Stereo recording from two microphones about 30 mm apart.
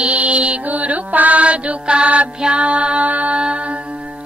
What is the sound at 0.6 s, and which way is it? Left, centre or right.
Music, right.